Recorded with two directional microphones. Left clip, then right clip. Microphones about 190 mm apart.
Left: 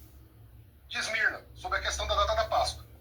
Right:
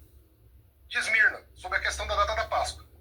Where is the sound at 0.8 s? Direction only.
10° right (ahead or behind).